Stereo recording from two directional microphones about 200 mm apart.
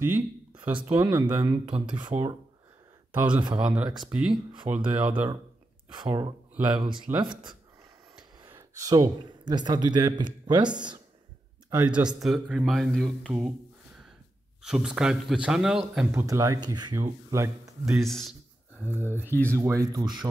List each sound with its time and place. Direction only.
0.0 s speech: 10° right (ahead or behind)
3.1 s speech: 10° right (ahead or behind)
5.9 s speech: 20° right (ahead or behind)
11.7 s speech: 5° right (ahead or behind)
14.6 s speech: 5° right (ahead or behind)
17.9 s speech: centre (ahead or behind)
18.8 s speech: 10° right (ahead or behind)
19.2 s speech: 10° left (ahead or behind)
19.5 s speech: 15° right (ahead or behind)